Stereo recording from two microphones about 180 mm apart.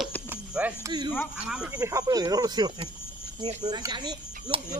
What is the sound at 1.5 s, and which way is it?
Speech, 5° right (ahead or behind).